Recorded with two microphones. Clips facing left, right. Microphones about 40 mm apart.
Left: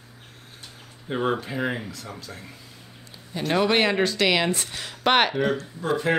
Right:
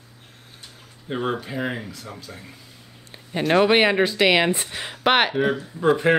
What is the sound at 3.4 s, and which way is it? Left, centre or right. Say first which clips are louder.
Speech: right 4 dB; centre.